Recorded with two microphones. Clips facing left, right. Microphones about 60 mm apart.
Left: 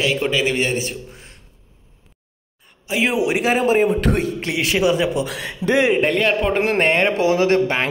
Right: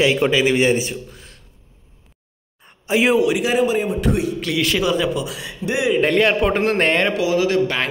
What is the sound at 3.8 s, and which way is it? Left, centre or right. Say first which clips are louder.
Speech: left 2 dB; left.